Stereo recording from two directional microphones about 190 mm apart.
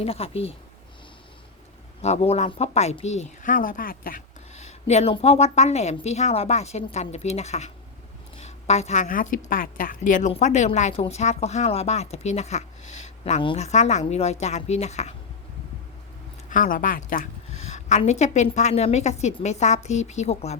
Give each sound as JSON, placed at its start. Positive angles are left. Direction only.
{"t": 0.0, "sound": "a woman's voice", "side_deg": 30}
{"t": 2.0, "sound": "a woman's voice", "side_deg": 35}
{"t": 16.5, "sound": "a woman's voice", "side_deg": 45}